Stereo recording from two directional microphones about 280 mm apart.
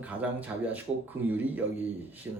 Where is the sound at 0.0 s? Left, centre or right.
Centre.